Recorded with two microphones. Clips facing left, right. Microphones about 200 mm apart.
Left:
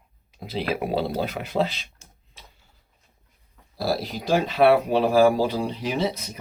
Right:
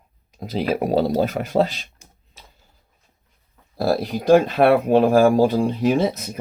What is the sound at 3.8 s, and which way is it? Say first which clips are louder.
Speech: right 5 dB; 50° right (ahead or behind).